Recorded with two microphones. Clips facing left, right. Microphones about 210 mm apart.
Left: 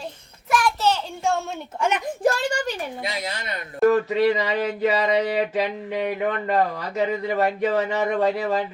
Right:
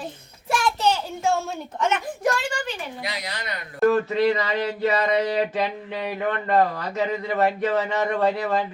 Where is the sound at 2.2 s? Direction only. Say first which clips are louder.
Left 3 dB; 35° left (ahead or behind).